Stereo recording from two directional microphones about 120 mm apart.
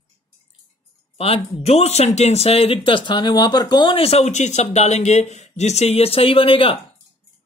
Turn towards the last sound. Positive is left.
turn(degrees=50)  # may be behind; listen again after turning